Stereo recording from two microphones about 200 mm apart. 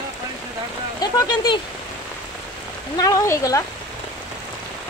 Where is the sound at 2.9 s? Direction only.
15° left (ahead or behind).